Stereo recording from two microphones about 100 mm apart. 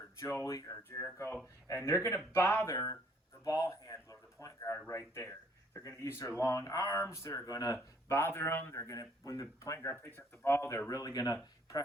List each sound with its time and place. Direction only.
0.2 s speech: 30° left (ahead or behind)
1.6 s speech: 30° left (ahead or behind)
3.4 s a sound: 35° left (ahead or behind)
4.9 s speech: 25° left (ahead or behind)
10.8 s speech: 35° left (ahead or behind)